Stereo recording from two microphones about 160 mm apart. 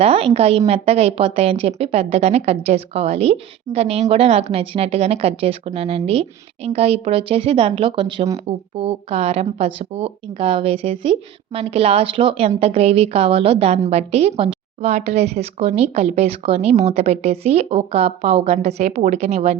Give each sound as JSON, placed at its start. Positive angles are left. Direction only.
{"t": 0.0, "sound": "a woman's voice", "side_deg": -35}